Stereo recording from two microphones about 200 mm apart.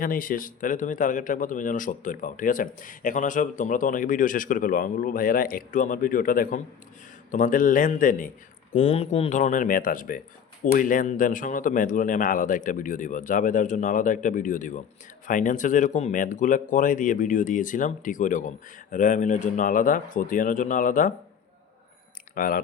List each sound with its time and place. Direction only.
0.0 s a man's voice: 45° left (ahead or behind)
22.4 s speech: 45° left (ahead or behind)